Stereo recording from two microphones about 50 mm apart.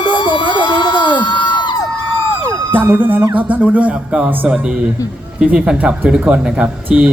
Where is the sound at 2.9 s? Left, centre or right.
Right.